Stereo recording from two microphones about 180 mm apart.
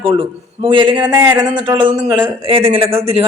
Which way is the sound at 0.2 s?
25° right (ahead or behind).